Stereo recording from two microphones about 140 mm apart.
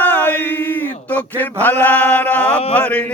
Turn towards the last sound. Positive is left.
turn(degrees=10)  # may be behind; listen again after turning